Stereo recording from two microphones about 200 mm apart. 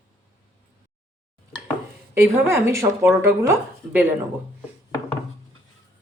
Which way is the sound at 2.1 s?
15° right (ahead or behind).